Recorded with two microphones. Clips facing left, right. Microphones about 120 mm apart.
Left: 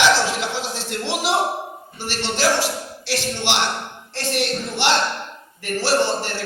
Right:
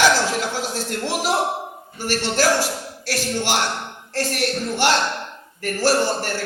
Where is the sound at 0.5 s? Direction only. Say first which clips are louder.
Right 1 dB; 45° right (ahead or behind).